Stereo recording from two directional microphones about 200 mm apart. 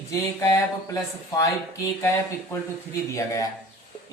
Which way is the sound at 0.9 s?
15° left (ahead or behind).